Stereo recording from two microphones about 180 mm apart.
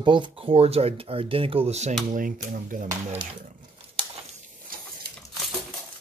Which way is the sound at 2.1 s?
50° right (ahead or behind).